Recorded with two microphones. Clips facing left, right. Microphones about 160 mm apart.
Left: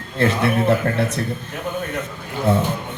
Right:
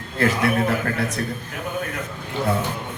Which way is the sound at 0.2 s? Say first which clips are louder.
Left 2 dB; 30° left (ahead or behind).